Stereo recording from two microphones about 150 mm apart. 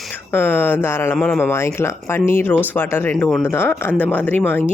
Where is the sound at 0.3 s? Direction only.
15° left (ahead or behind).